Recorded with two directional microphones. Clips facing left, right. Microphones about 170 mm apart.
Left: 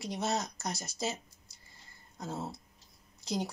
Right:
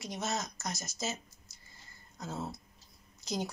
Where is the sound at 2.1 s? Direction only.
30° left (ahead or behind).